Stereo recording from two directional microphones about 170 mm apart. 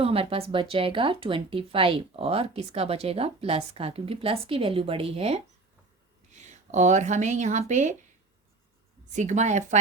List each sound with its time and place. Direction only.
0.0 s speech: 35° right (ahead or behind)
9.0 s speech: 45° right (ahead or behind)